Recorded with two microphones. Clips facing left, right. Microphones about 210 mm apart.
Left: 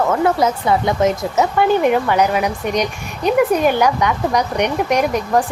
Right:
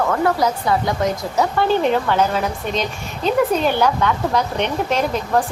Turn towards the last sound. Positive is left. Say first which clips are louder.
# left 3 dB
turn(degrees=15)  # may be behind; listen again after turning